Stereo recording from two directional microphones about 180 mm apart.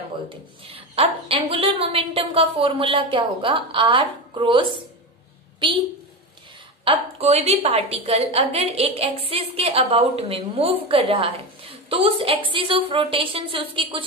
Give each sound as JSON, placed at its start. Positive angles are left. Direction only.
{"t": 0.7, "sound": "a woman's voice", "side_deg": -30}
{"t": 6.8, "sound": "a woman's voice", "side_deg": -35}